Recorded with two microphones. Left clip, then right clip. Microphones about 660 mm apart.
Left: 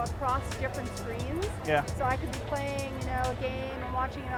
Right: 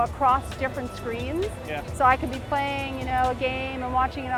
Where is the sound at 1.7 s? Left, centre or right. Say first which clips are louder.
Left 5 dB; left.